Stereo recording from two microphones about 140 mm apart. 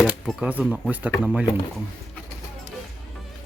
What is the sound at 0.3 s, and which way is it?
Speech, 5° right (ahead or behind).